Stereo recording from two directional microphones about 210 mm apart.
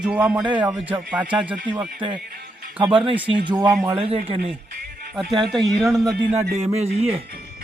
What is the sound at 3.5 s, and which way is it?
A man's voice, 20° right (ahead or behind).